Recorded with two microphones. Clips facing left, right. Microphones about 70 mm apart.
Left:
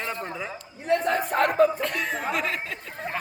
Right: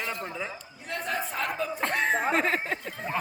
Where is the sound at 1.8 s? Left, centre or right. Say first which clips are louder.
Right 2 dB; right.